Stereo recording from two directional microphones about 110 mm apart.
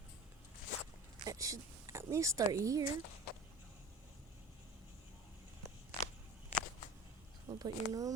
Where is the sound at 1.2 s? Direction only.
30° right (ahead or behind).